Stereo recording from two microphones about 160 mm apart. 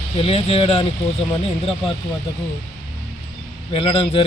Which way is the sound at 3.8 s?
30° left (ahead or behind).